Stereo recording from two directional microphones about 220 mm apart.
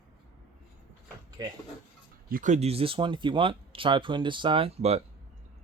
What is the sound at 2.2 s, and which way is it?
Speech, 35° right (ahead or behind).